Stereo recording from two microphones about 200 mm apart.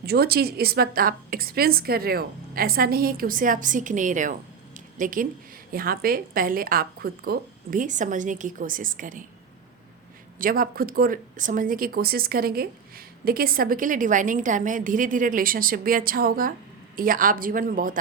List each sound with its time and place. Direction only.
0.0 s a woman's voice: 50° right (ahead or behind)
10.3 s a woman's voice: 45° right (ahead or behind)